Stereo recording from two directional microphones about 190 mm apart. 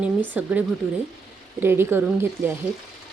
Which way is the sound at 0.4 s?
5° right (ahead or behind).